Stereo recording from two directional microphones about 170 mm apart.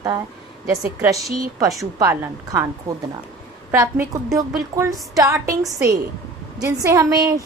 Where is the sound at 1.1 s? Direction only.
20° right (ahead or behind).